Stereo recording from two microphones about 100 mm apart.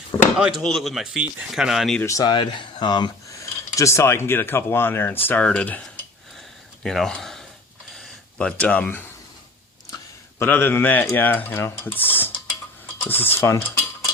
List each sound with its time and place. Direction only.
0.3 s speech: 5° right (ahead or behind)
2.0 s speech: 35° left (ahead or behind)
2.3 s speech: 55° left (ahead or behind)
3.4 s speech: 30° left (ahead or behind); by 5.8 s 15° left (ahead or behind)
6.8 s speech: 5° left (ahead or behind)
7.9 s a sound: 5° left (ahead or behind)
10.4 s speech: 20° left (ahead or behind)